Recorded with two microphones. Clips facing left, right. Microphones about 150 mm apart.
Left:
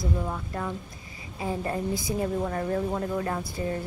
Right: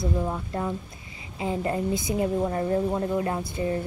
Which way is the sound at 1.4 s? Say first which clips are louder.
Right 3 dB; 20° right (ahead or behind).